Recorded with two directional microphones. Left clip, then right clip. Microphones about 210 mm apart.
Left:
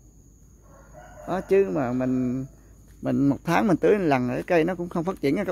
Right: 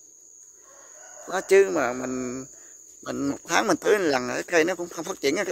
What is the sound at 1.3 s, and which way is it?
Speech, 10° right (ahead or behind).